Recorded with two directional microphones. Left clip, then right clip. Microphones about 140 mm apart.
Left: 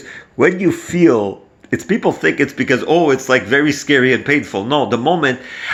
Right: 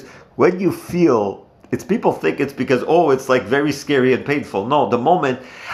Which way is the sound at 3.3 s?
75° left (ahead or behind).